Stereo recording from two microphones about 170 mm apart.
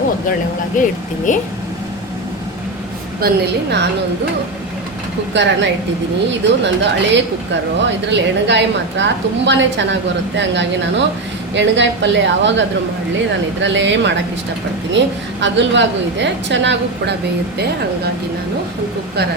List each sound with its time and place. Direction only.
0.8 s speech: 50° left (ahead or behind)
3.2 s a woman's voice: 70° right (ahead or behind)
5.3 s a woman's voice: 90° right